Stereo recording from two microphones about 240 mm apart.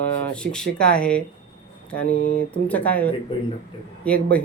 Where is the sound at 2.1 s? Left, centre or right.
Left.